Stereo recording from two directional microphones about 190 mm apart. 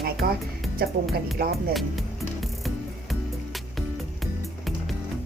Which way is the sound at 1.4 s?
55° right (ahead or behind).